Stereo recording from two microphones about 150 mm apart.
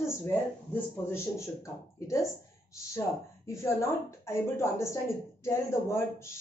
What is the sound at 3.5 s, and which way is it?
Speech, 20° left (ahead or behind).